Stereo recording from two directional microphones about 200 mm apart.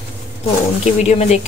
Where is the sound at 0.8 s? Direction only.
35° left (ahead or behind).